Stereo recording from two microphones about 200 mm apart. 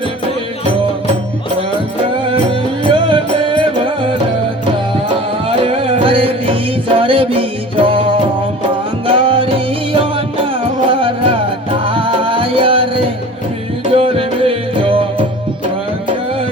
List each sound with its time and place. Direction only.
2.3 s music: 25° right (ahead or behind)
5.5 s music: 30° right (ahead or behind)
13.9 s music: 25° right (ahead or behind)